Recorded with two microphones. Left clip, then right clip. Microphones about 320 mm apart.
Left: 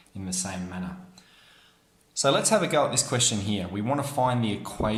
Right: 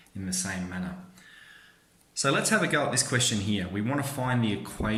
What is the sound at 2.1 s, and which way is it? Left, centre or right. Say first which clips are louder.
Speech: left 3 dB; centre.